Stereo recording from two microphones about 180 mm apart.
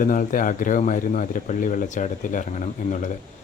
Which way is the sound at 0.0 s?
50° left (ahead or behind).